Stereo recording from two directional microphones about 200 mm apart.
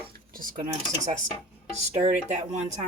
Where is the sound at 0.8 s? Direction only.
35° right (ahead or behind).